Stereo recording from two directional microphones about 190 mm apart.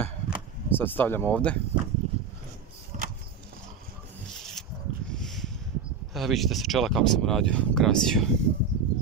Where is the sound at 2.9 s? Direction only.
40° right (ahead or behind).